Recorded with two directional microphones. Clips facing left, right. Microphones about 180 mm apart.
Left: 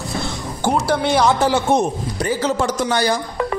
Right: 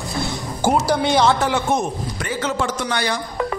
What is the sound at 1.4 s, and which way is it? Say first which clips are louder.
A man's voice: left 4 dB; 35° left (ahead or behind).